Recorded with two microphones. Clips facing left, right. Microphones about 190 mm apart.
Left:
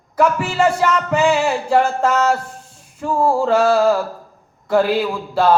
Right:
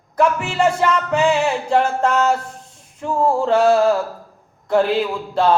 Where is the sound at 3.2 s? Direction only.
10° left (ahead or behind).